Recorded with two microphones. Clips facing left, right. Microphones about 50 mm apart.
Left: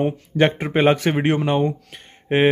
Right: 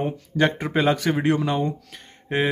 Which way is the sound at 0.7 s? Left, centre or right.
Left.